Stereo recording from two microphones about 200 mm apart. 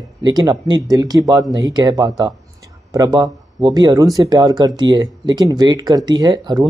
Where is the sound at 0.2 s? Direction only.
20° right (ahead or behind).